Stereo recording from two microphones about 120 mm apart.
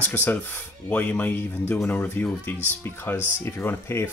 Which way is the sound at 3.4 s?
20° left (ahead or behind).